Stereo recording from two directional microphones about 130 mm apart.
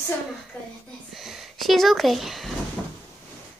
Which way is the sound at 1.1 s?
Centre (ahead or behind).